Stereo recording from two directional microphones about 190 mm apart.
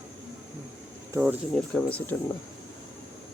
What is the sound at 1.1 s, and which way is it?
Speech, 10° right (ahead or behind).